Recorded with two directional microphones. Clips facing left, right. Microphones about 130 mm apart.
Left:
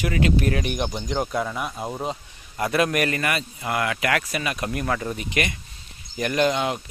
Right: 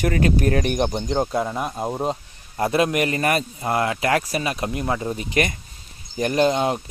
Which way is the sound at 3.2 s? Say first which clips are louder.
Right 5 dB; 40° right (ahead or behind).